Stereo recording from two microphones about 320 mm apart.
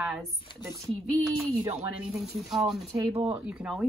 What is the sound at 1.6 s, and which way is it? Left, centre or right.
Speech, centre.